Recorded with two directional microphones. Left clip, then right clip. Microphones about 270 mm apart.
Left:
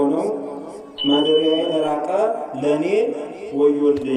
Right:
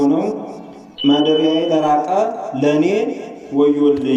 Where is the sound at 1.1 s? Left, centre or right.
Right.